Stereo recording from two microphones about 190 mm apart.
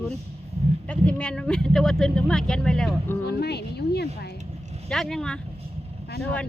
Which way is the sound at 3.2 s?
60° left (ahead or behind).